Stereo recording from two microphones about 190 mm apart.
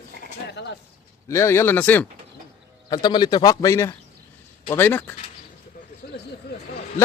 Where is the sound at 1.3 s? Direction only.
15° left (ahead or behind).